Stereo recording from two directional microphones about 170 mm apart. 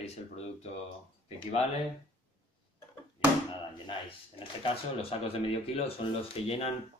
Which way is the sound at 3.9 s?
30° left (ahead or behind).